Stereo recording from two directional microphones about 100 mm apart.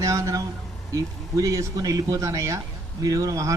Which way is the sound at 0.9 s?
35° right (ahead or behind).